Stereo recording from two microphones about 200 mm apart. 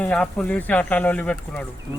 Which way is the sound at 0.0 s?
5° left (ahead or behind).